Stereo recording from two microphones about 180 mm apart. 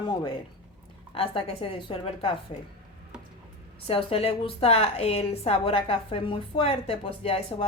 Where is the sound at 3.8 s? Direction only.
30° left (ahead or behind).